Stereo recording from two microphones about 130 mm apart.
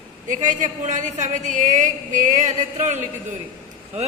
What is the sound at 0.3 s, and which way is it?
A man's voice, 75° right (ahead or behind).